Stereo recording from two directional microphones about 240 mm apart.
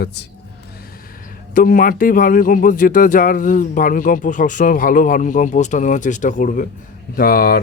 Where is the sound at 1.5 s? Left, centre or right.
Left.